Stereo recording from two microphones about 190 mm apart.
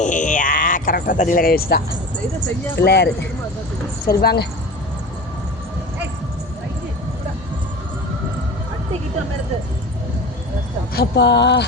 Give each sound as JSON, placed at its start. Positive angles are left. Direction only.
{"t": 0.0, "sound": "a sound", "side_deg": 40}
{"t": 2.7, "sound": "speech", "side_deg": 60}
{"t": 10.9, "sound": "speech", "side_deg": 65}